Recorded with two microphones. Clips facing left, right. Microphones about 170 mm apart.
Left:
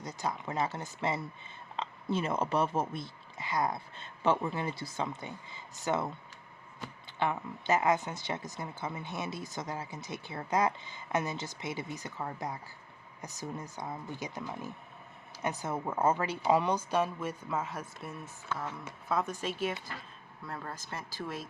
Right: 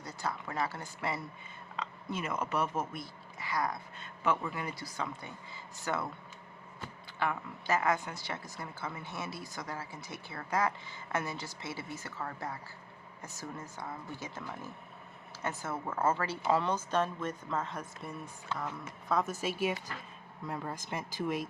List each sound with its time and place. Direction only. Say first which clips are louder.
0.0 s speech: left 2 dB; 20° left (ahead or behind)
7.2 s speech: left 2 dB; 20° left (ahead or behind); by 21.4 s 15° right (ahead or behind)